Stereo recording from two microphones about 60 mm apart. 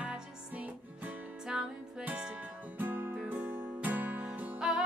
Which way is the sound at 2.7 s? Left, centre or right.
Right.